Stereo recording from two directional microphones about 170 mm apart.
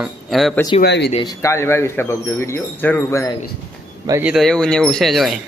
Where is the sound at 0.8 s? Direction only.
85° left.